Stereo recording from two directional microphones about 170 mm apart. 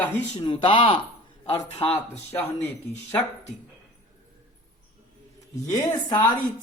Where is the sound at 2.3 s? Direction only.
10° left (ahead or behind).